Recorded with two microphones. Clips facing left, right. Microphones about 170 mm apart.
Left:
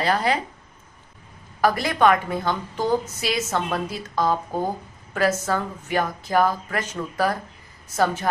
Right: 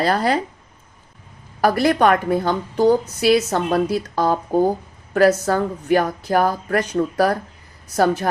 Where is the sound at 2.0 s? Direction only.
45° right (ahead or behind).